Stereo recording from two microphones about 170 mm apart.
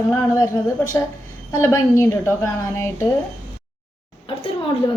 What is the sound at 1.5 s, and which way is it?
A woman's voice, 15° left (ahead or behind).